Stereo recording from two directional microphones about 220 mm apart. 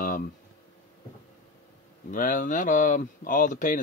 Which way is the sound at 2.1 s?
35° left (ahead or behind).